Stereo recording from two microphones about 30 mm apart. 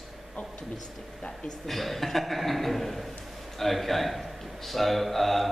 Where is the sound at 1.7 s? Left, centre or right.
Centre.